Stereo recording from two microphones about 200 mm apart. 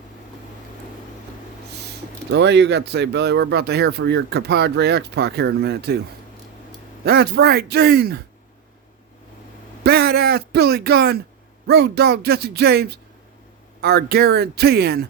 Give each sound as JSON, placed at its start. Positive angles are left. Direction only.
{"t": 2.3, "sound": "speech", "side_deg": -60}
{"t": 7.0, "sound": "speech", "side_deg": -55}
{"t": 9.8, "sound": "speech", "side_deg": -50}